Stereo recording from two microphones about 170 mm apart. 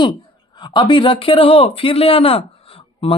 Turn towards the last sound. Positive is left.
turn(degrees=35)  # may be behind; listen again after turning